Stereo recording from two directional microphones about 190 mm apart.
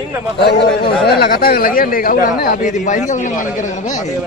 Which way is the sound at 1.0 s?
50° left (ahead or behind).